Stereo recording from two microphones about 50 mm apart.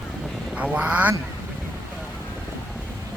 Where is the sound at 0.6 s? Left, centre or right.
Right.